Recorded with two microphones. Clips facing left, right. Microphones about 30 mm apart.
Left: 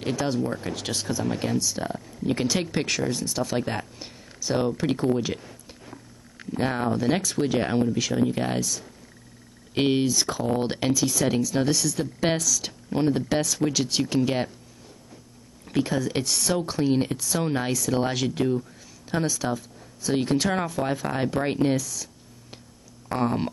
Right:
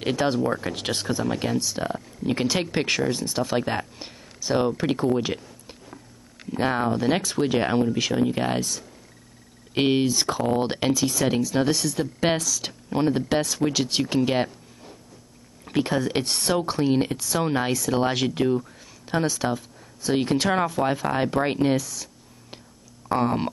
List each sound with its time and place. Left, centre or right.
0.0 s speech: right
0.4 s speech: centre
1.2 s speech: centre
8.5 s speech: right
9.8 s speech: centre
12.0 s speech: centre
12.4 s speech: right
12.9 s speech: centre
15.6 s speech: right